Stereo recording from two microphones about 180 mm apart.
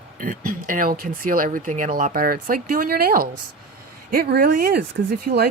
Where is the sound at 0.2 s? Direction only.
50° right (ahead or behind).